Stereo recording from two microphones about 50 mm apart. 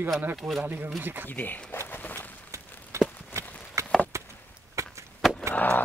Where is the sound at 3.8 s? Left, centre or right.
Right.